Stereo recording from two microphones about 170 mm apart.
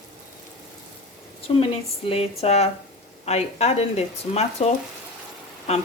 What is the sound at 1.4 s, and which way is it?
Speech, 35° left (ahead or behind).